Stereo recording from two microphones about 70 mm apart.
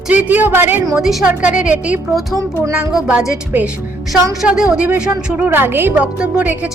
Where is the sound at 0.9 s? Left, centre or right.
Centre.